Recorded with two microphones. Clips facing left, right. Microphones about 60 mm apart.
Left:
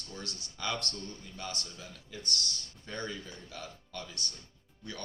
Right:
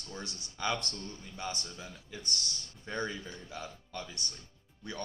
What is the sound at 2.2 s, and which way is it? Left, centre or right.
Speech, left.